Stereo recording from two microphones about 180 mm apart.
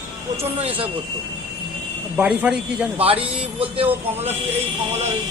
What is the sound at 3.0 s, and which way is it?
Speech, 30° right (ahead or behind).